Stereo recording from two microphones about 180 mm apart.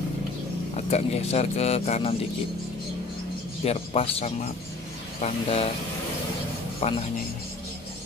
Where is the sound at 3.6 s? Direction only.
35° left (ahead or behind).